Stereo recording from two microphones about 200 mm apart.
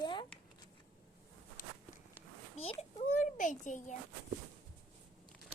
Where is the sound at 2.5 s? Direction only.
30° left (ahead or behind).